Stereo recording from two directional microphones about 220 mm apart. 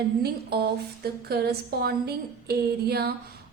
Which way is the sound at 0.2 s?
45° right (ahead or behind).